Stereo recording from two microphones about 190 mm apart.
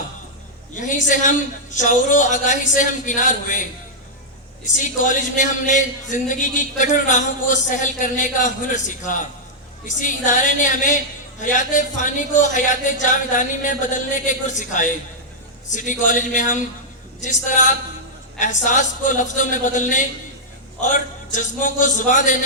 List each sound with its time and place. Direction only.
0.8 s a man's voice: 40° left (ahead or behind)
4.8 s a man's voice: 40° left (ahead or behind)
10.0 s a sound: 40° left (ahead or behind)
11.3 s a man's voice: 40° left (ahead or behind)